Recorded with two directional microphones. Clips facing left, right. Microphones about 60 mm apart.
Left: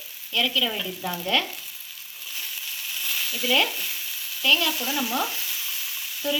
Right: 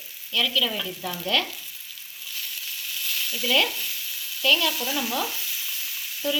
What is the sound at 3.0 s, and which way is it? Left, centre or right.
Frying, left.